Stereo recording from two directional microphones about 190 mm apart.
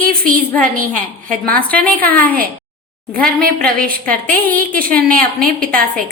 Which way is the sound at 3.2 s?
50° right (ahead or behind).